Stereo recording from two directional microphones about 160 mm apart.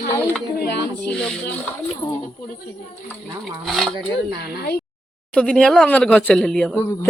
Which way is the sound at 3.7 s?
Centre (ahead or behind).